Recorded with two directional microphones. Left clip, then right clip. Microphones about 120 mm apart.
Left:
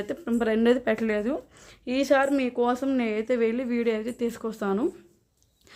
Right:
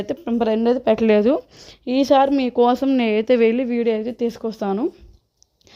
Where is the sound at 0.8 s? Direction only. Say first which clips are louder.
Right 9 dB; 45° right (ahead or behind).